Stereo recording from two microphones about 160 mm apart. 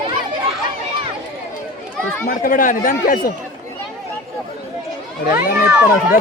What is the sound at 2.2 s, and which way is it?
Speech, 60° left (ahead or behind).